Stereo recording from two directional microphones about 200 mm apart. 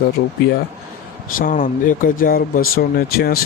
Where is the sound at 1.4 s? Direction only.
40° left (ahead or behind).